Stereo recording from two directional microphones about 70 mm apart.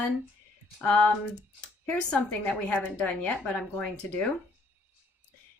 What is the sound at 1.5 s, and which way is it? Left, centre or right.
Speech, centre.